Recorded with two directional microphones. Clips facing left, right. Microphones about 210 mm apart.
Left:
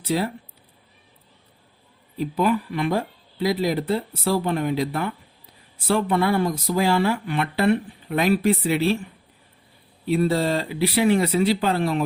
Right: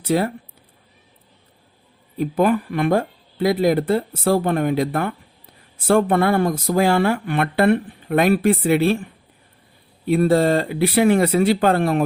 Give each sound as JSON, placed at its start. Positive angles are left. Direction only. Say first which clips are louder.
{"t": 0.0, "sound": "speech", "louder": "right 4 dB", "side_deg": -50}
{"t": 2.1, "sound": "speech", "louder": "right 4 dB", "side_deg": -50}
{"t": 10.1, "sound": "speech", "louder": "right 5 dB", "side_deg": -55}